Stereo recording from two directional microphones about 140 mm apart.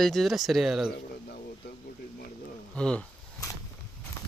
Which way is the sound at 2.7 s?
5° left (ahead or behind).